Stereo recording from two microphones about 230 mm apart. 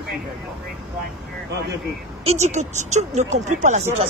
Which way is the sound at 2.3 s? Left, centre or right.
Right.